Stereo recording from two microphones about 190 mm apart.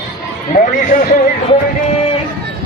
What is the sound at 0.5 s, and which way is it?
Speech, 50° left (ahead or behind).